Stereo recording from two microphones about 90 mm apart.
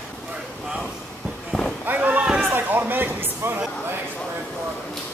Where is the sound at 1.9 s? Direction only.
15° right (ahead or behind).